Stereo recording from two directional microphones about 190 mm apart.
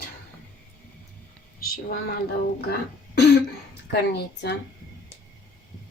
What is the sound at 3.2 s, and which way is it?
Throat clearing, 60° left (ahead or behind).